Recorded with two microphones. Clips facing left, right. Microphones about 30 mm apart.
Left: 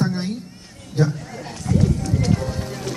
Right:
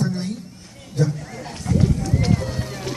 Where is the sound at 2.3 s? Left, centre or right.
Centre.